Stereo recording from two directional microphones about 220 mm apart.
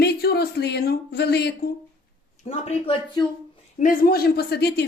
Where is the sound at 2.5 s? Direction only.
25° left (ahead or behind).